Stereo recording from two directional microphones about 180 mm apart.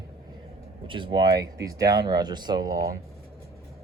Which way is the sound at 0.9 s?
25° right (ahead or behind).